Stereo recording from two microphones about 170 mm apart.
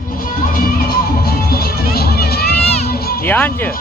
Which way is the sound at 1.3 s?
65° left (ahead or behind).